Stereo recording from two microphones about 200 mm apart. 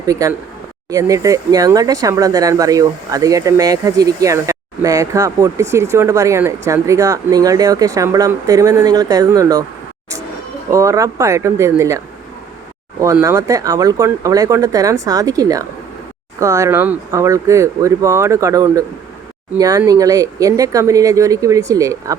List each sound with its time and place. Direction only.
0.0 s speech: 15° right (ahead or behind)
10.7 s speech: 15° right (ahead or behind)
13.2 s speech: 15° right (ahead or behind)